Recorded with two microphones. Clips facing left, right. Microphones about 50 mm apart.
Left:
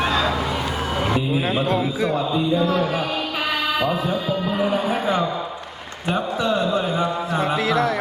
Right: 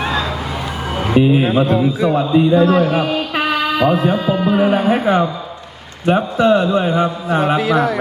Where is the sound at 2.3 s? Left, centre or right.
Right.